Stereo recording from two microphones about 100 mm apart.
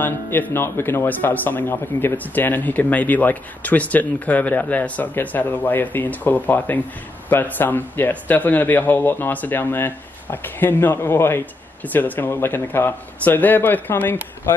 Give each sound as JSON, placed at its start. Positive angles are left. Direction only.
{"t": 0.0, "sound": "a man's voice", "side_deg": 20}